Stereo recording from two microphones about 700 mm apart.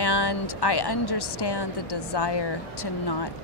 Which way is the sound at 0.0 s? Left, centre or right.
Left.